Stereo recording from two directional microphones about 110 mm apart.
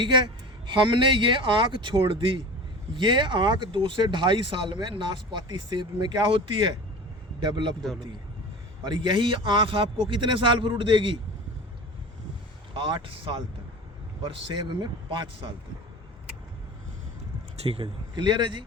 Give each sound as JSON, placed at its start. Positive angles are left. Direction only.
{"t": 0.0, "sound": "speech", "side_deg": -45}
{"t": 8.8, "sound": "speech", "side_deg": -45}
{"t": 12.7, "sound": "speech", "side_deg": -50}
{"t": 14.3, "sound": "speech", "side_deg": -50}
{"t": 17.6, "sound": "speech", "side_deg": -60}
{"t": 18.1, "sound": "speech", "side_deg": -45}